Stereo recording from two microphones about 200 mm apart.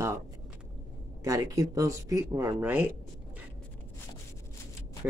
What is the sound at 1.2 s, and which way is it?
Speech, 15° right (ahead or behind).